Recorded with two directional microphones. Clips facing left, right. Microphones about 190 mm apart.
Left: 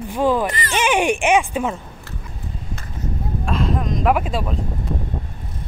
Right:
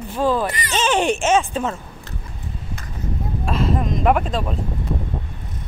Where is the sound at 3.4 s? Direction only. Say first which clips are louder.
Right 1 dB; centre (ahead or behind).